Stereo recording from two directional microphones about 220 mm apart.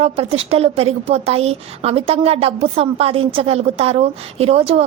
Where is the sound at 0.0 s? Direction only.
25° right (ahead or behind).